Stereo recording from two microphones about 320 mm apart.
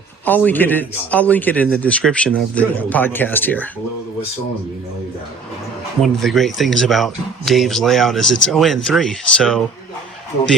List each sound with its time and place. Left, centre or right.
0.3 s speech: centre
6.0 s speech: centre